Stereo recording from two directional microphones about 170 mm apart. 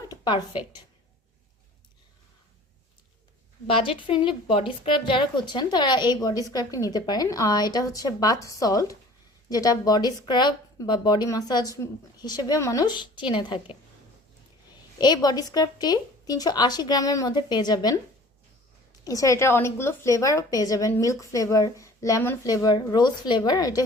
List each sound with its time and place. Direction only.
0.1 s a woman's voice: 25° left (ahead or behind)
3.7 s a woman's voice: 30° left (ahead or behind)
14.9 s a woman's voice: 25° left (ahead or behind)
19.0 s a woman's voice: 20° left (ahead or behind)